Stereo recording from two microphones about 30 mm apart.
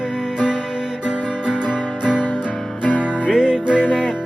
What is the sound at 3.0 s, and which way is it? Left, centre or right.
Music, right.